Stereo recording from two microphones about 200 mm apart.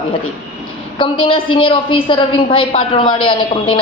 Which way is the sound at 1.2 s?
25° left (ahead or behind).